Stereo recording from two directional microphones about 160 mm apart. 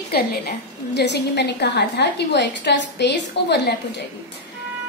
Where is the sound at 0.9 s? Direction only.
90° left.